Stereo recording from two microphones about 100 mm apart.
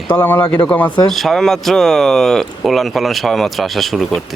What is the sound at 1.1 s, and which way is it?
Speech, 5° left (ahead or behind).